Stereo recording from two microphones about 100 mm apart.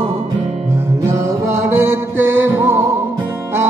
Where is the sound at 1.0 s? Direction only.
30° right (ahead or behind).